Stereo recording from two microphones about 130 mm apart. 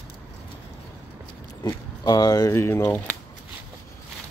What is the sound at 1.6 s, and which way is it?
Speech, 30° left (ahead or behind).